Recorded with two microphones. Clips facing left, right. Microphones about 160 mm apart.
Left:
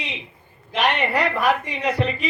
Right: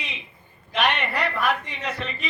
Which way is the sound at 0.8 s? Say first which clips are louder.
Left 2 dB; 15° left (ahead or behind).